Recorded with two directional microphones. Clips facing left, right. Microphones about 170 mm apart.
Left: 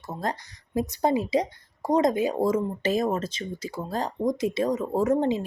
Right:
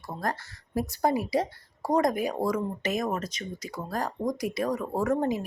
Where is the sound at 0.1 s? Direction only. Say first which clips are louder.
Left 1 dB; 20° left (ahead or behind).